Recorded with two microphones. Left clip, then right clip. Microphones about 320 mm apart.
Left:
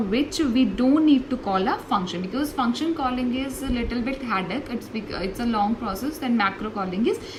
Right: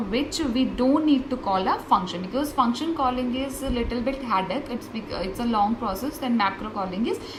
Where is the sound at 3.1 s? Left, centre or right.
Right.